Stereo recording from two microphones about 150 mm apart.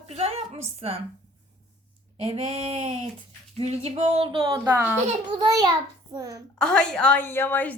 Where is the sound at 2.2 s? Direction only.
40° right (ahead or behind).